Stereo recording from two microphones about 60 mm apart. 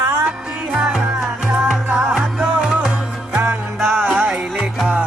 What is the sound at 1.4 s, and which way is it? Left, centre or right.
Music, centre.